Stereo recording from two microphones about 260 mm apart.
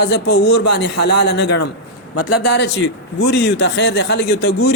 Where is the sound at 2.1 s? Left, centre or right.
Left.